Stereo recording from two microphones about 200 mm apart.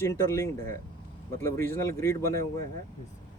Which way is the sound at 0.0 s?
15° left (ahead or behind).